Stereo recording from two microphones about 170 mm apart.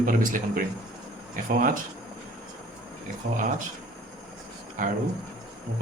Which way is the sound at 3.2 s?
50° right (ahead or behind).